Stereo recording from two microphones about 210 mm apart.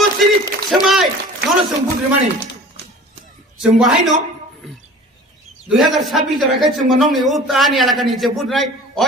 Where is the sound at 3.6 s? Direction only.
Centre (ahead or behind).